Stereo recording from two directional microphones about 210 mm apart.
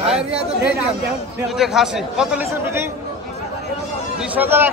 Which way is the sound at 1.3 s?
Centre (ahead or behind).